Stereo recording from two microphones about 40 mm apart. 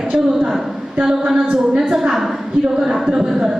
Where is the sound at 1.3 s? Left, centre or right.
Centre.